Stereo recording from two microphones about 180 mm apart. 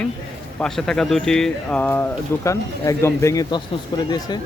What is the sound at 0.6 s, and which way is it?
Speech, 5° left (ahead or behind).